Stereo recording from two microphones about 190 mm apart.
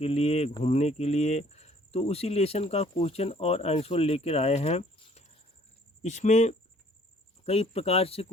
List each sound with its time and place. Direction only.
0.0 s speech: 30° left (ahead or behind)